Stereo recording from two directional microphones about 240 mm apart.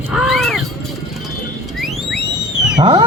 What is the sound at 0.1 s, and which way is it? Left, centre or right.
Roaring cats, centre.